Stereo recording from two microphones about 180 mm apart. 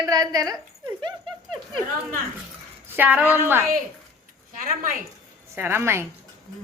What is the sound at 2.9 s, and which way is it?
Speech, 10° right (ahead or behind).